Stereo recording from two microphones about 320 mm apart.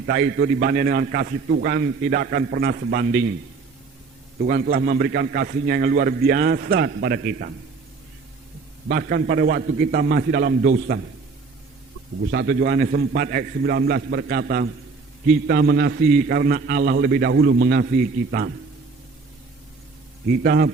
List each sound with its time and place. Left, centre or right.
0.1 s a man's voice: right
4.4 s a man's voice: right
8.9 s a man's voice: right
12.3 s a man's voice: right
20.4 s a man's voice: right